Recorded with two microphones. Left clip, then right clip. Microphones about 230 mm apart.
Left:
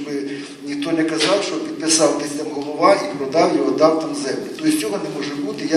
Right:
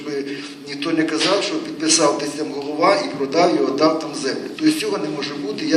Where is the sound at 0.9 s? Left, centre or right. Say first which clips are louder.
Even; right.